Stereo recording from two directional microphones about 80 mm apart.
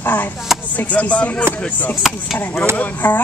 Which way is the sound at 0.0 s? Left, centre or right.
Left.